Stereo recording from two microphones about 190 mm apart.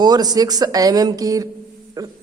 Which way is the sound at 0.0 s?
20° right (ahead or behind).